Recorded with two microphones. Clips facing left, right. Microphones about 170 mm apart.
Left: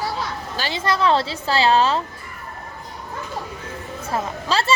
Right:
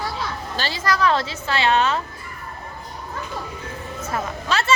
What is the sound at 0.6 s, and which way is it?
A woman's voice, 25° left (ahead or behind).